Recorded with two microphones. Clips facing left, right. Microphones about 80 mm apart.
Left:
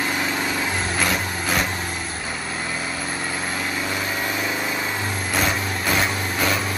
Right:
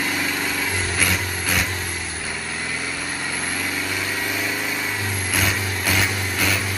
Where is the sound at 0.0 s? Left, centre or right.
Left.